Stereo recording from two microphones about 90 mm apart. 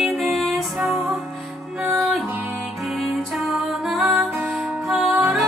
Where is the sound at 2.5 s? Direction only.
Centre (ahead or behind).